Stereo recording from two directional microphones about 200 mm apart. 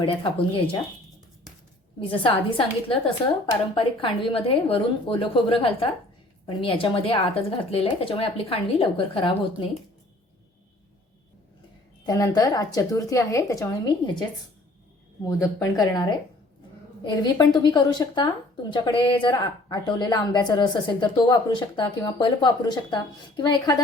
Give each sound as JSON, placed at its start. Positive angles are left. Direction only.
{"t": 0.0, "sound": "a woman's voice", "side_deg": 25}
{"t": 2.2, "sound": "a woman's voice", "side_deg": 25}
{"t": 12.0, "sound": "a woman's voice", "side_deg": 20}
{"t": 15.2, "sound": "a woman's voice", "side_deg": 15}